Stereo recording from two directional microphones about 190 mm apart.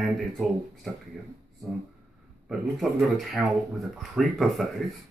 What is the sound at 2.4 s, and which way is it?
Speech, centre (ahead or behind).